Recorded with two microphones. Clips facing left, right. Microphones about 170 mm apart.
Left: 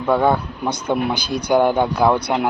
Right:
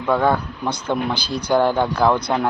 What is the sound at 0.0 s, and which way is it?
Speech, 10° left (ahead or behind).